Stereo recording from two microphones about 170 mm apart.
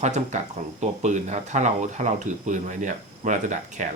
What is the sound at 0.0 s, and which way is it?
Speech, 45° right (ahead or behind).